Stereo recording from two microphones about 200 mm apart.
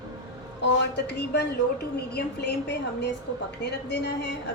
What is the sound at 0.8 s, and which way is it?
Speech, 55° left (ahead or behind).